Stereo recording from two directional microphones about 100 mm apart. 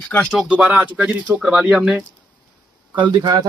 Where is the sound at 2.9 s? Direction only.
50° right (ahead or behind).